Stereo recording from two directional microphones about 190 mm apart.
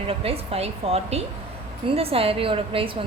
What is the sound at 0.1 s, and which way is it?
A woman's voice, 30° right (ahead or behind).